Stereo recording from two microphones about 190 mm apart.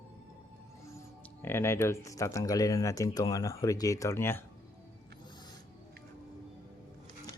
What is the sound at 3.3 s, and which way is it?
Speech, 15° left (ahead or behind).